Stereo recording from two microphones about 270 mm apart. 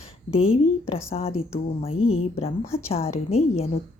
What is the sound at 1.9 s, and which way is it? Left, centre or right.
Speech, left.